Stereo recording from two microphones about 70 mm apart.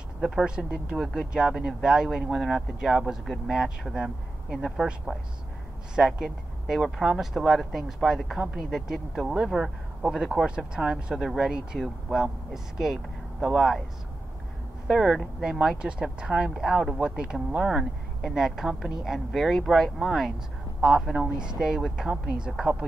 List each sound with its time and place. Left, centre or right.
0.2 s speech: centre
14.9 s speech: centre